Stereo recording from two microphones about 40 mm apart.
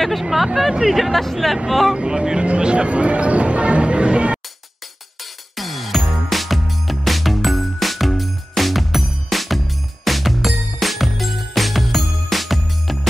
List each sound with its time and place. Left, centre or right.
0.0 s speech: centre
2.0 s speech: centre
5.2 s music: centre